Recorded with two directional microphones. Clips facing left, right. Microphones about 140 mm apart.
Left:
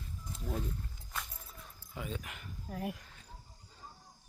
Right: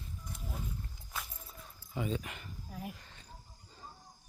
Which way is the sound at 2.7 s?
70° left (ahead or behind).